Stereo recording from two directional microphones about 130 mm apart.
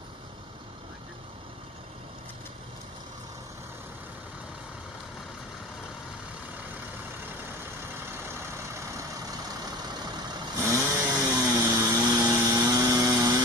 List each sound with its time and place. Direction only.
10.6 s vehicle: 25° right (ahead or behind)